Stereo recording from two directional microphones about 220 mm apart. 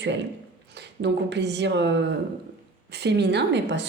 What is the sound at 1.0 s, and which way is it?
Speech, 50° right (ahead or behind).